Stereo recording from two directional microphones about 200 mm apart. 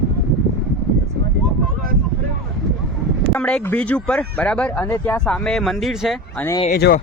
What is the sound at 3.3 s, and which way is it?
Speech, 10° left (ahead or behind).